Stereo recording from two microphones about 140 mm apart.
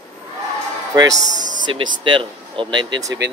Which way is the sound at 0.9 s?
25° right (ahead or behind).